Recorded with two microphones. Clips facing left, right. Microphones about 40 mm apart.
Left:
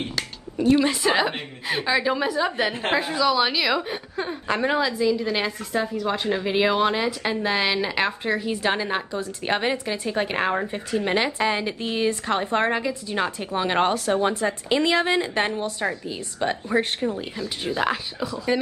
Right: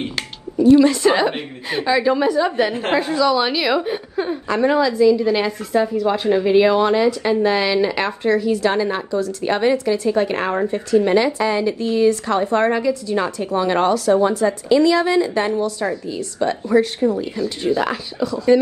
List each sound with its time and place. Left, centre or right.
0.6 s a woman's voice: left
1.0 s a woman's voice: centre
4.6 s speech: centre
4.9 s a woman's voice: centre
8.2 s a woman's voice: left
17.7 s speech: centre